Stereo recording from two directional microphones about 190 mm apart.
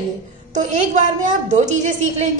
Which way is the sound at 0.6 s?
40° right (ahead or behind).